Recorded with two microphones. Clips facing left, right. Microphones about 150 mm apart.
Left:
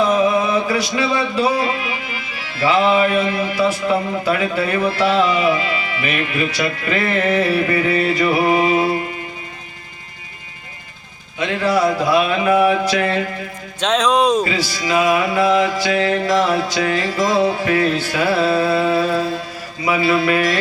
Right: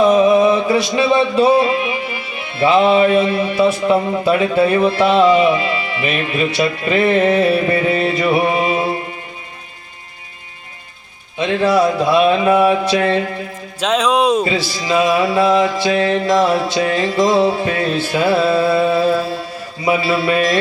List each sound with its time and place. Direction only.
0.0 s a sound: 25° right (ahead or behind)
11.3 s music: 25° right (ahead or behind)
13.7 s speech: 5° right (ahead or behind)
14.4 s music: 25° right (ahead or behind)